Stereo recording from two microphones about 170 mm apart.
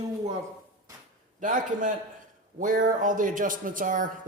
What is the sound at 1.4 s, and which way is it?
Speech, 50° right (ahead or behind).